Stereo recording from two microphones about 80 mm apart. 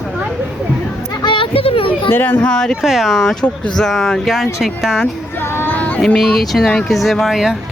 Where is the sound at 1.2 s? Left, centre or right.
Left.